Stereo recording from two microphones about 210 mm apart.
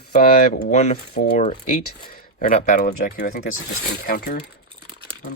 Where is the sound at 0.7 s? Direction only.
30° left (ahead or behind).